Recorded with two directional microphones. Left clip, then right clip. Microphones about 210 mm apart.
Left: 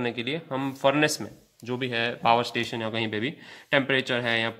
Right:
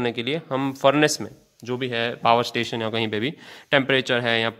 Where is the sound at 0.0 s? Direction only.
40° right (ahead or behind).